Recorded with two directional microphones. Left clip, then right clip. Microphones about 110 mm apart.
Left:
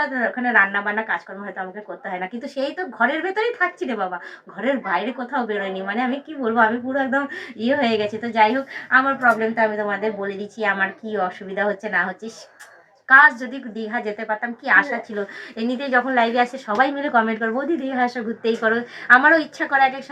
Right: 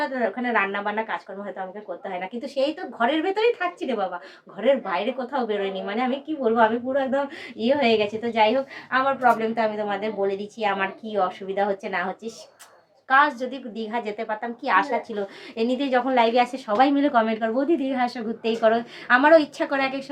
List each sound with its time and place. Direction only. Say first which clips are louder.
0.1 s a woman's voice: left 4 dB; 30° right (ahead or behind)
2.6 s a woman's voice: left 2 dB; 35° right (ahead or behind)
13.1 s a woman's voice: left 7 dB; 30° right (ahead or behind)